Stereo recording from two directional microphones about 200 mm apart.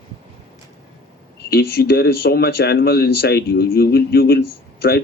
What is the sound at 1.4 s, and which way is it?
Speech, 50° left (ahead or behind).